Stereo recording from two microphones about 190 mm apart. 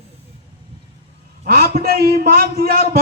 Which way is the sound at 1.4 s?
50° right (ahead or behind).